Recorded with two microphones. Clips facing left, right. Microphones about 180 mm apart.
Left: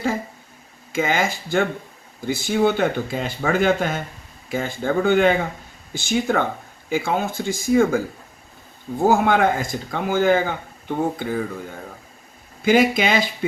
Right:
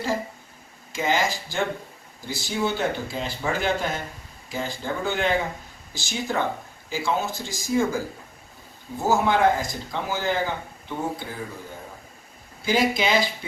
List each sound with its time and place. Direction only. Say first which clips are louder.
0.9 s speech: left 3 dB; 55° left (ahead or behind)
12.6 s speech: left 5 dB; 55° left (ahead or behind)